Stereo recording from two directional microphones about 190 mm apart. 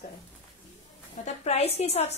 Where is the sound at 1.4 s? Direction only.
35° left (ahead or behind).